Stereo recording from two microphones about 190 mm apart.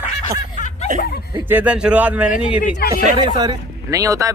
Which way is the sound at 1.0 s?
55° left (ahead or behind).